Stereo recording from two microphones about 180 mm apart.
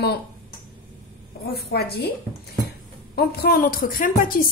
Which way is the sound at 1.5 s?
60° left (ahead or behind).